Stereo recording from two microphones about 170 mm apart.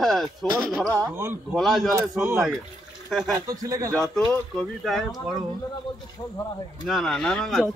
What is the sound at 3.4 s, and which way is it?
Speech, 20° right (ahead or behind).